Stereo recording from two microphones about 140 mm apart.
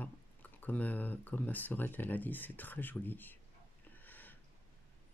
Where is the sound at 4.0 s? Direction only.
15° left (ahead or behind).